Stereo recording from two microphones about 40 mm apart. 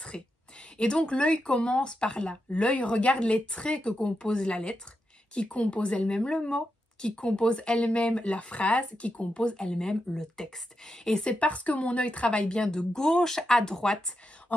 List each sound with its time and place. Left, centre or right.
0.1 s speech: centre
11.2 s a woman's voice: left
12.6 s speech: centre